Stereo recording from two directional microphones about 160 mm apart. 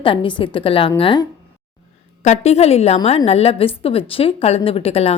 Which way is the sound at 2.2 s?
45° left (ahead or behind).